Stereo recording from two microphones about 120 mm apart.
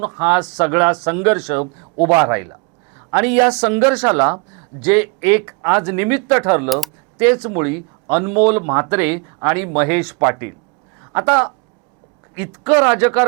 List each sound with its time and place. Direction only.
0.0 s speech: 20° right (ahead or behind)
6.7 s speech: centre (ahead or behind)
7.2 s a woman's voice: 20° right (ahead or behind)